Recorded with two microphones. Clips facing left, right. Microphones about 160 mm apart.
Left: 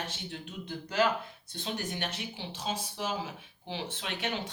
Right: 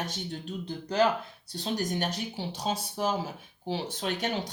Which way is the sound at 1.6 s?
40° right (ahead or behind).